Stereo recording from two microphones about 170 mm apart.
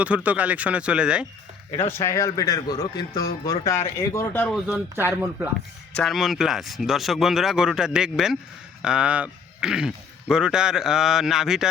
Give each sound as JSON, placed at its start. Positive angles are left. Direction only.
{"t": 0.0, "sound": "speech", "side_deg": -10}
{"t": 1.9, "sound": "a man's voice", "side_deg": 15}
{"t": 4.6, "sound": "speech", "side_deg": -5}